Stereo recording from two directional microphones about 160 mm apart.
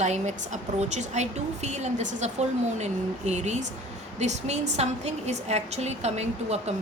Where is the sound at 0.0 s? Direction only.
45° right (ahead or behind).